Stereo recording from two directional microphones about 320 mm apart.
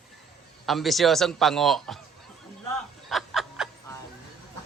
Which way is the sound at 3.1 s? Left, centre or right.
Centre.